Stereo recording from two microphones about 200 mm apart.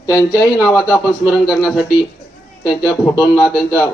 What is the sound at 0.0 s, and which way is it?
Speech, 15° left (ahead or behind).